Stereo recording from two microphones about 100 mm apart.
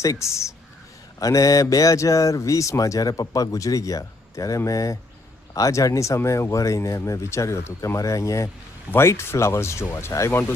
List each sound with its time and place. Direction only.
0.0 s speech: 30° left (ahead or behind)